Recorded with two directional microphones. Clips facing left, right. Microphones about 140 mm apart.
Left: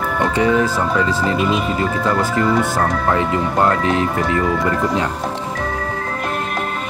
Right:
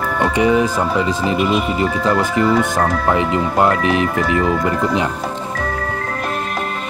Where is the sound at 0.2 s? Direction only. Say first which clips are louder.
Right 1 dB; 15° right (ahead or behind).